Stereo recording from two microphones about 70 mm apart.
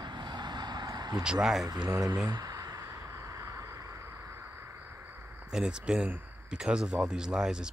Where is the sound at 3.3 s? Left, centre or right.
Right.